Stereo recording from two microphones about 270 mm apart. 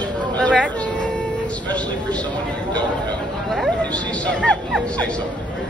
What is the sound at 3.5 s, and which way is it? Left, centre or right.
A man's voice, centre.